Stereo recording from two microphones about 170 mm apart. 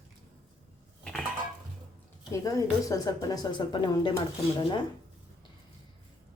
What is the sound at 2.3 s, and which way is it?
Speech, 20° left (ahead or behind).